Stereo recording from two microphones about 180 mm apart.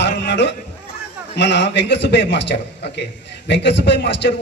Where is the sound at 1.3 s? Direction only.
70° left (ahead or behind).